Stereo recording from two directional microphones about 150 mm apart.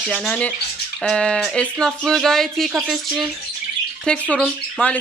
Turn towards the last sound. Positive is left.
turn(degrees=10)  # may be behind; listen again after turning